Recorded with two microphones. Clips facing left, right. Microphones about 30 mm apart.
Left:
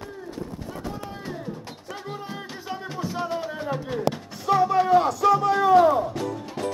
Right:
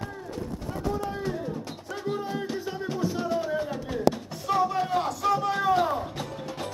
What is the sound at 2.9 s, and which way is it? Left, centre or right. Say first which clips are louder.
Music: right 1 dB; centre.